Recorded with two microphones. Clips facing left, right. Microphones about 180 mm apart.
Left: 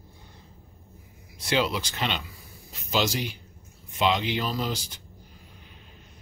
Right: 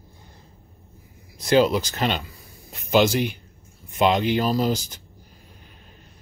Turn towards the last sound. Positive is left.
turn(degrees=-45)  # may be behind; listen again after turning